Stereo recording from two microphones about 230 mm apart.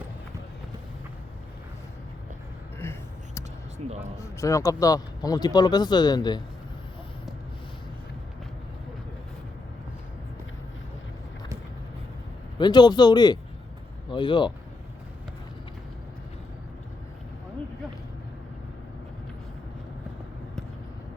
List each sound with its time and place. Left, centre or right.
2.8 s a sound: centre
3.8 s speech: right
4.2 s speech: centre
12.5 s speech: centre